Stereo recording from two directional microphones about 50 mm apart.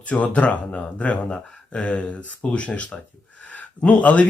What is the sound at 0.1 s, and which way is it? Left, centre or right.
Speech, left.